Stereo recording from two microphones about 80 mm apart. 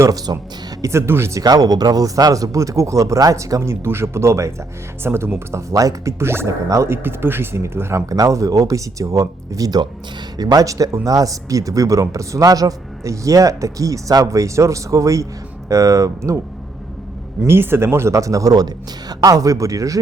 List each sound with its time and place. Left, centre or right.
0.1 s speech: right
0.8 s speech: right
1.4 s speech: right
5.7 s speech: right
8.1 s speech: right
17.4 s speech: right